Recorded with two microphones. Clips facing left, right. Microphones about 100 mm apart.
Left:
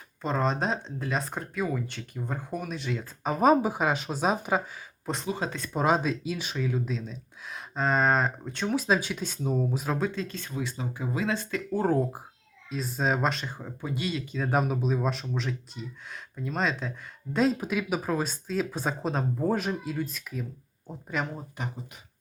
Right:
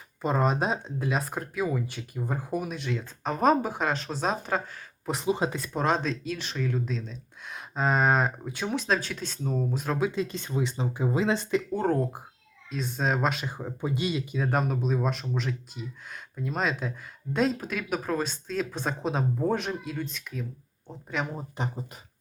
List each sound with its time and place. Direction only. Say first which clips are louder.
0.2 s speech: right 2 dB; 10° right (ahead or behind); by 4.8 s 5° left (ahead or behind)
5.0 s speech: right 4 dB; 15° right (ahead or behind)
5.5 s speech: even; 5° right (ahead or behind)
5.8 s speech: left 2 dB; 5° left (ahead or behind)
10.0 s speech: right 3 dB; 15° right (ahead or behind)
11.7 s speech: left 5 dB; 5° left (ahead or behind); by 14.3 s 20° right (ahead or behind)
14.3 s speech: left 3 dB; centre (ahead or behind)
21.6 s speech: right 4 dB; 30° right (ahead or behind)